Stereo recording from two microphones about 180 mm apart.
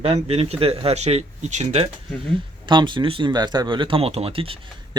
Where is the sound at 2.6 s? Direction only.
25° right (ahead or behind).